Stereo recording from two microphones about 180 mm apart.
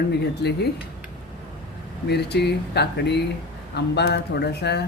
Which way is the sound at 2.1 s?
65° left (ahead or behind).